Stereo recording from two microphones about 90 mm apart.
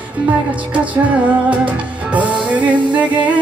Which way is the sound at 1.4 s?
15° right (ahead or behind).